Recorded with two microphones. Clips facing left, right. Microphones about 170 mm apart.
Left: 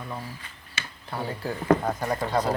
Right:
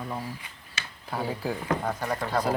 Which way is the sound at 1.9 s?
10° left (ahead or behind).